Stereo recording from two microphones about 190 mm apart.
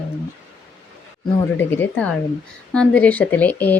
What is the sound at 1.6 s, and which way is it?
Speech, 10° left (ahead or behind).